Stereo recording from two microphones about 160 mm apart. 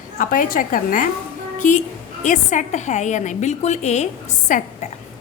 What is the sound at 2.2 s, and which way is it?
A woman's voice, 50° left (ahead or behind).